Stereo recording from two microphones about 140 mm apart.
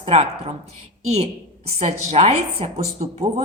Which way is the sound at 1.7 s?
50° right (ahead or behind).